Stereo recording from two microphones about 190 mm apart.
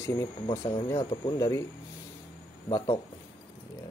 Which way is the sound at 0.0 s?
15° left (ahead or behind).